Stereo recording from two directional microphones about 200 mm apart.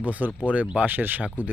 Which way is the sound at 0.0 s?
5° right (ahead or behind).